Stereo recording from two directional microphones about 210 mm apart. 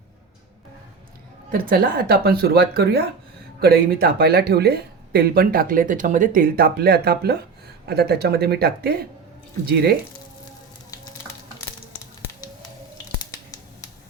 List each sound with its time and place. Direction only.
1.5 s speech: 45° right (ahead or behind)